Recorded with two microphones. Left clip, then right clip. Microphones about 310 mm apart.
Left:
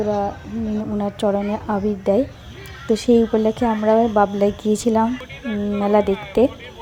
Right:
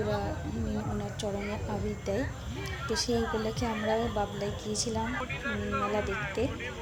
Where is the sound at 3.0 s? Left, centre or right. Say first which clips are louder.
Left 18 dB; centre.